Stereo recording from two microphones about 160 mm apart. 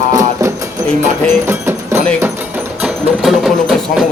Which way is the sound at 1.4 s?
15° right (ahead or behind).